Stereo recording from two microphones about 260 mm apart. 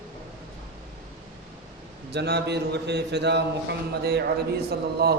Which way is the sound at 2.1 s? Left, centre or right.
Right.